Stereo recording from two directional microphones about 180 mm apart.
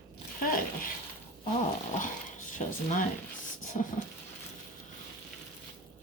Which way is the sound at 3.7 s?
35° left (ahead or behind).